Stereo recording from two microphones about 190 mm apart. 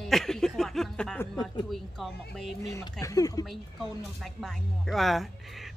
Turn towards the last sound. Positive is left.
turn(degrees=0)  # may be behind; listen again after turning